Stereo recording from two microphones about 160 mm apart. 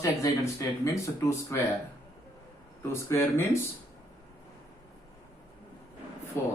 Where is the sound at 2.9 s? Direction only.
15° left (ahead or behind).